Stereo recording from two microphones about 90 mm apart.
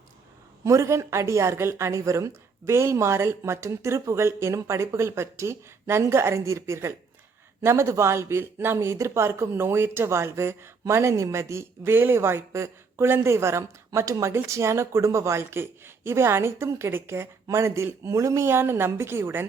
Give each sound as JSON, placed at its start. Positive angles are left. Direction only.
{"t": 0.6, "sound": "speech", "side_deg": -35}